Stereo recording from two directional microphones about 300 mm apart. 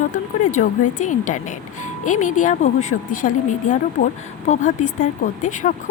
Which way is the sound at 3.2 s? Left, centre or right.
Left.